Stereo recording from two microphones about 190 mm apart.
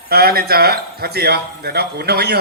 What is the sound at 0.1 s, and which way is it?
Speech, 55° right (ahead or behind).